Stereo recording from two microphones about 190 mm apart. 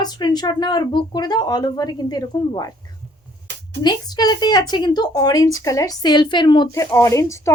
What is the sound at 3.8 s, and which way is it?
Speech, 20° left (ahead or behind).